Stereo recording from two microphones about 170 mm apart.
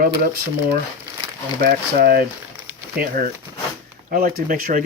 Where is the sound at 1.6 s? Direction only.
60° right (ahead or behind).